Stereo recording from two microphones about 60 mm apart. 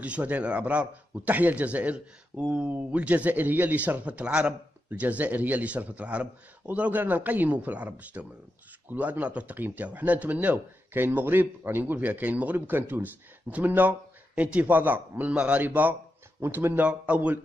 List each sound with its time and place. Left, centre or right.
0.0 s speech: right
16.3 s speech: right
16.8 s speech: right